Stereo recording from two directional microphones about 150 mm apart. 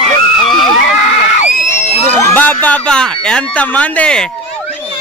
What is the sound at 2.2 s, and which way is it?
Speech, 15° left (ahead or behind).